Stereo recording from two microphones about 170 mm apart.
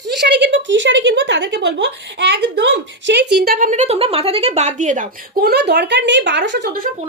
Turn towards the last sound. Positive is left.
turn(degrees=-80)